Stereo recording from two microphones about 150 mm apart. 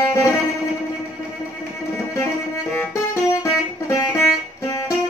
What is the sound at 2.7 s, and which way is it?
Music, 20° left (ahead or behind).